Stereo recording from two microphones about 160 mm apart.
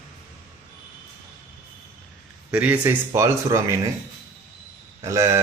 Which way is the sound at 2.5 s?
10° right (ahead or behind).